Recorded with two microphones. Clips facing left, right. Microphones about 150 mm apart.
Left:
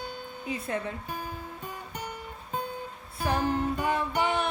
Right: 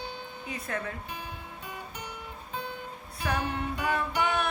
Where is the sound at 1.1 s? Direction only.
40° left (ahead or behind).